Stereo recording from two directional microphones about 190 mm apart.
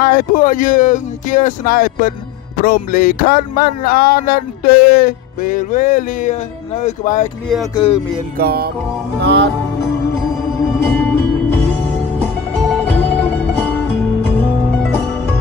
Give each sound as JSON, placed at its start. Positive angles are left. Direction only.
{"t": 0.0, "sound": "speech", "side_deg": 45}
{"t": 7.7, "sound": "speech", "side_deg": 30}
{"t": 8.4, "sound": "music", "side_deg": -55}
{"t": 9.2, "sound": "music", "side_deg": -65}
{"t": 10.9, "sound": "music", "side_deg": 10}
{"t": 12.5, "sound": "music", "side_deg": 5}